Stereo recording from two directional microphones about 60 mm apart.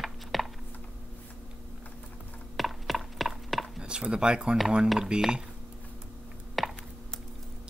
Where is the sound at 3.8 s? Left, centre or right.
Centre.